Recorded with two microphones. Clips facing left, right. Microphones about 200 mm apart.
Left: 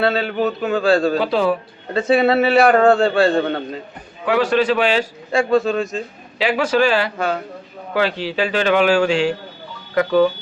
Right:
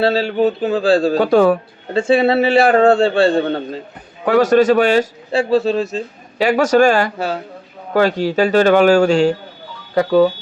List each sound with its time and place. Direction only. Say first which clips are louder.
0.0 s speech: right 4 dB; 30° right (ahead or behind)
1.2 s a man's voice: right 6 dB; 50° right (ahead or behind)
1.9 s a man's voice: right 2 dB; 30° right (ahead or behind)
4.3 s a man's voice: right 5 dB; 45° right (ahead or behind)
6.4 s a man's voice: right 5 dB; 45° right (ahead or behind)